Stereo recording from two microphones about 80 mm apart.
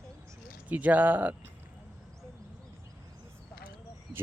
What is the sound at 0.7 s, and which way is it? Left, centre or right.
Speech, centre.